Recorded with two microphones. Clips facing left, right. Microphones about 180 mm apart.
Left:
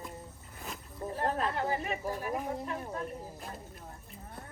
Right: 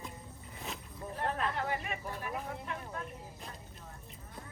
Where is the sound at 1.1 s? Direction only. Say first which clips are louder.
Left 3 dB; 35° left (ahead or behind).